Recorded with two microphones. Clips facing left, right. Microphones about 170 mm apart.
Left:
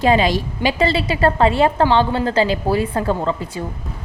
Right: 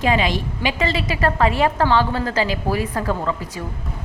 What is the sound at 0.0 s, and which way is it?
A woman's voice, 35° left (ahead or behind).